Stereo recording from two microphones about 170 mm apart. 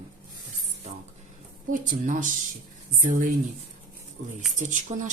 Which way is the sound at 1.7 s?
50° right (ahead or behind).